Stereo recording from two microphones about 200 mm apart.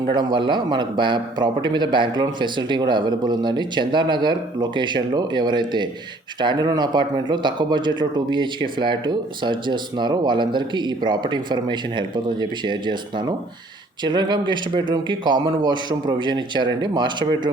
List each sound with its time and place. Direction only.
0.1 s speech: 25° right (ahead or behind)